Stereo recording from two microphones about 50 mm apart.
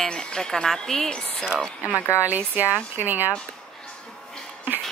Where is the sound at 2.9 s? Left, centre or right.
Right.